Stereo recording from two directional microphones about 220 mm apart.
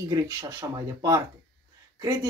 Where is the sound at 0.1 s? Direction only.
15° right (ahead or behind).